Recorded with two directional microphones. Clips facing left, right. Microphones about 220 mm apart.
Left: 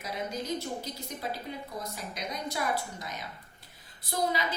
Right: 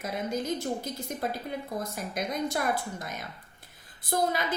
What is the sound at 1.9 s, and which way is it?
A woman's voice, 50° right (ahead or behind).